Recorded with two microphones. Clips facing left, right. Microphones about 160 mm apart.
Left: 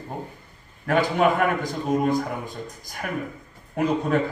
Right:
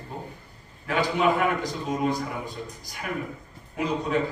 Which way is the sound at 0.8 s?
50° left (ahead or behind).